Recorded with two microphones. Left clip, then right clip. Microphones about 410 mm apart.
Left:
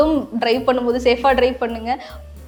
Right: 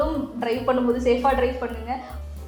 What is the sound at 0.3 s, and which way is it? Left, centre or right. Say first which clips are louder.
A woman's voice: left 4 dB; left.